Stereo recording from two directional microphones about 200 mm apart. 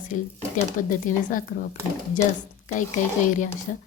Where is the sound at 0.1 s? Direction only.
40° left (ahead or behind).